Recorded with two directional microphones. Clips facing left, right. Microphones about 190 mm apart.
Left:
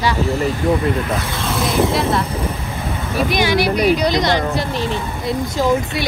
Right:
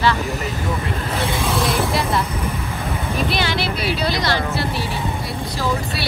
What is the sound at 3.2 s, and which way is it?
Speech, 15° left (ahead or behind).